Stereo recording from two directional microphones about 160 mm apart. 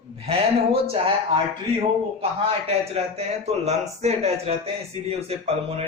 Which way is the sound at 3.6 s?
40° right (ahead or behind).